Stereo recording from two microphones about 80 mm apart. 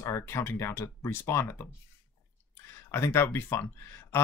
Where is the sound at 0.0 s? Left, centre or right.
Left.